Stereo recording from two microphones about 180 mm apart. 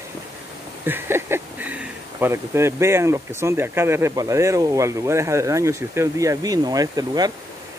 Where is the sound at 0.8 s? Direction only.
10° right (ahead or behind).